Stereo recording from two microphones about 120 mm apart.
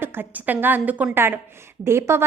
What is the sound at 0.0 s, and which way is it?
A woman's voice, 15° right (ahead or behind).